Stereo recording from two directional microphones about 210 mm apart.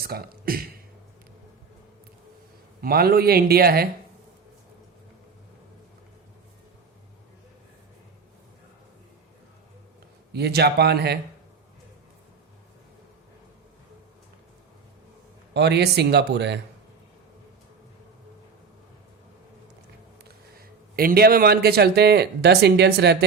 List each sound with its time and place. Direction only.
0.0 s speech: 45° right (ahead or behind)
2.8 s speech: 45° right (ahead or behind)
10.3 s speech: 50° right (ahead or behind)
15.5 s speech: 50° right (ahead or behind)
20.2 s speech: 45° right (ahead or behind)